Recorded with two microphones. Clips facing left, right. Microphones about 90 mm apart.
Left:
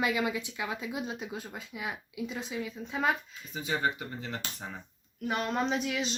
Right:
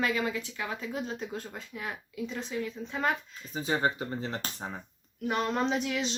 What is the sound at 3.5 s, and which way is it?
Speech, 35° right (ahead or behind).